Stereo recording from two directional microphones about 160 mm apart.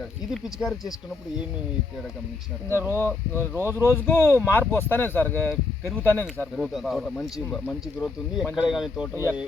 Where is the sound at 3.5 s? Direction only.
15° right (ahead or behind).